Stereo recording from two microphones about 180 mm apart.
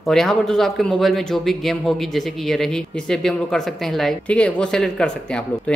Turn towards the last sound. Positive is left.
turn(degrees=5)  # may be behind; listen again after turning